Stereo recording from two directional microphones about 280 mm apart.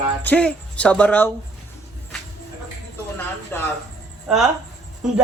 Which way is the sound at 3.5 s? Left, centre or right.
Centre.